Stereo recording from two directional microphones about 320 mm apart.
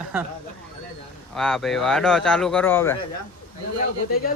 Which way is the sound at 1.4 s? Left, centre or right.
Centre.